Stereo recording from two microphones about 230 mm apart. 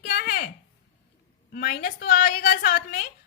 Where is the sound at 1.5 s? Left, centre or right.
Left.